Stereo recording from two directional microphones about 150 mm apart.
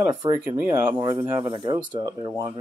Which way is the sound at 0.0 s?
25° right (ahead or behind).